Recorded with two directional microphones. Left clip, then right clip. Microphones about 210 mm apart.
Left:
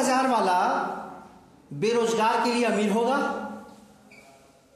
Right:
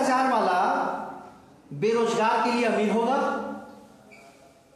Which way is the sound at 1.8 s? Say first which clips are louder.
Even; 45° left (ahead or behind).